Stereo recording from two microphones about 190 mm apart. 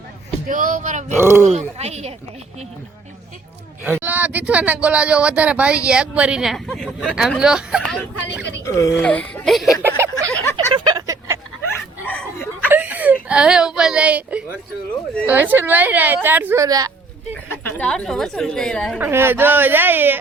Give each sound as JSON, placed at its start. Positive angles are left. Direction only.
{"t": 0.4, "sound": "speech", "side_deg": -45}
{"t": 1.2, "sound": "speech", "side_deg": -15}
{"t": 1.5, "sound": "speech", "side_deg": -35}
{"t": 3.8, "sound": "speech", "side_deg": -10}
{"t": 8.6, "sound": "speech", "side_deg": 15}
{"t": 10.0, "sound": "a sound", "side_deg": -15}
{"t": 10.3, "sound": "a sound", "side_deg": 15}
{"t": 10.8, "sound": "a sound", "side_deg": -20}
{"t": 12.0, "sound": "a sound", "side_deg": 10}
{"t": 12.6, "sound": "whimper", "side_deg": -10}
{"t": 15.3, "sound": "speech", "side_deg": -10}
{"t": 17.7, "sound": "speech", "side_deg": 5}
{"t": 18.9, "sound": "speech", "side_deg": -10}